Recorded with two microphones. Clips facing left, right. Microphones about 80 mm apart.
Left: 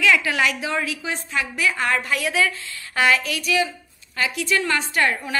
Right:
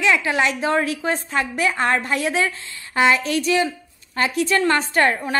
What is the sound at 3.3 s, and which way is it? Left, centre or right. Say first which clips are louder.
A woman's voice: right 3 dB; right.